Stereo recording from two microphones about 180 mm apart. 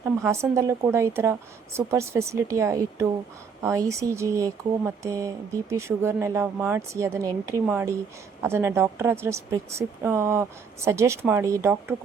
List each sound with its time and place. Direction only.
0.0 s speech: 15° right (ahead or behind)